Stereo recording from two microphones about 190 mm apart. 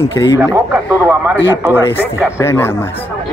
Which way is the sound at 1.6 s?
15° left (ahead or behind).